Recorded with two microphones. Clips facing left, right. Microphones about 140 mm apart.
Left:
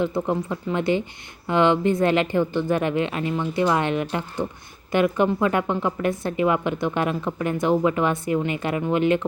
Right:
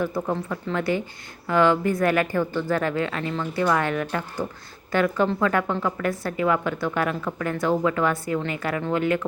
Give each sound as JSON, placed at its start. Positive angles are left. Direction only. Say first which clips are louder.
{"t": 0.0, "sound": "a woman's voice", "louder": "left 2 dB", "side_deg": 20}